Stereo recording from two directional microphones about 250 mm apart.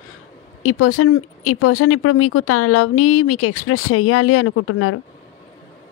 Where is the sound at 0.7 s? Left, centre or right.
Left.